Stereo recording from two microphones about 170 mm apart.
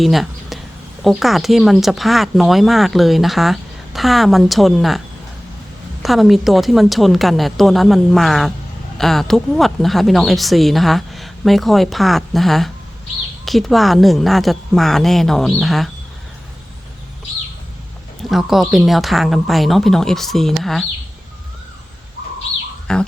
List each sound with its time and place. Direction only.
0.0 s a sound: centre (ahead or behind)
1.0 s speech: centre (ahead or behind)
18.3 s speech: centre (ahead or behind)
22.9 s speech: 5° left (ahead or behind)